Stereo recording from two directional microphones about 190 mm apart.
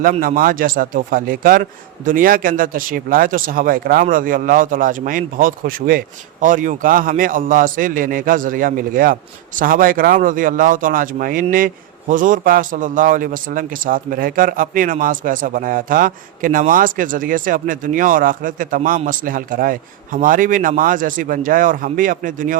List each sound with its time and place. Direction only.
0.0 s a man's voice: 45° right (ahead or behind)